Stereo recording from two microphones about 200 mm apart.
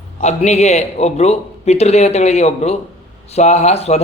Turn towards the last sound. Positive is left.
turn(degrees=30)  # may be behind; listen again after turning